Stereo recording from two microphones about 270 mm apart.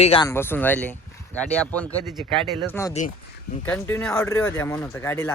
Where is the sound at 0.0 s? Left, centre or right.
Left.